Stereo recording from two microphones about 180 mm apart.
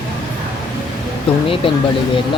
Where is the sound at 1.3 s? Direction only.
30° left (ahead or behind).